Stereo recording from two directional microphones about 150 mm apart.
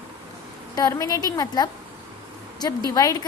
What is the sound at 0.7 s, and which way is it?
Speech, 25° left (ahead or behind).